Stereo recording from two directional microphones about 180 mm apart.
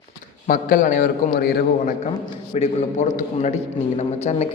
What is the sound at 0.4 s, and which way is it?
A man's voice, 50° left (ahead or behind).